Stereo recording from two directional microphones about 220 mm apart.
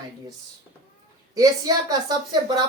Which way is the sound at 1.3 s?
15° right (ahead or behind).